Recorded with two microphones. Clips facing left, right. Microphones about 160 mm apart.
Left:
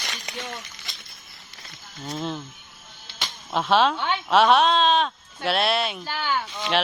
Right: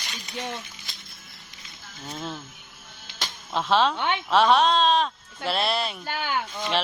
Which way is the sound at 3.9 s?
20° right (ahead or behind).